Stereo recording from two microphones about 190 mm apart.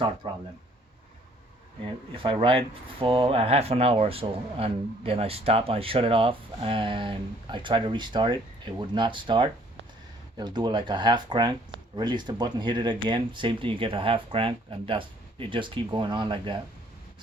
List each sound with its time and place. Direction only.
0.2 s speech: 25° right (ahead or behind)
2.1 s speech: 25° right (ahead or behind)